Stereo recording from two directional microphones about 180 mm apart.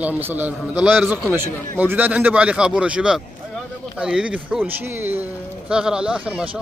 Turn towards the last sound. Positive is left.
turn(degrees=-5)  # may be behind; listen again after turning